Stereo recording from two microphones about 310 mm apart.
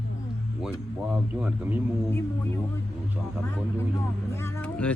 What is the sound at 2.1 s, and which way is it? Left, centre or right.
Speech, centre.